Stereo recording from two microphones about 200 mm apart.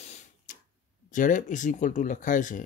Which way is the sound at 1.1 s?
40° left (ahead or behind).